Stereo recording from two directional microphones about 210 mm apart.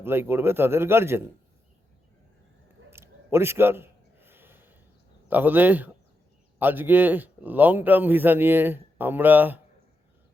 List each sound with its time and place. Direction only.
0.0 s speech: 10° right (ahead or behind)
2.9 s a sound: 10° right (ahead or behind)
5.3 s speech: 10° right (ahead or behind)